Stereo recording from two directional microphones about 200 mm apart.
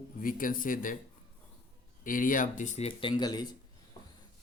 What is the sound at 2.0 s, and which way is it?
Speech, 45° left (ahead or behind).